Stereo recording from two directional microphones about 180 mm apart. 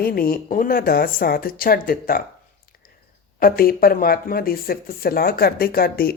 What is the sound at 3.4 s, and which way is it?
Speech, 55° left (ahead or behind).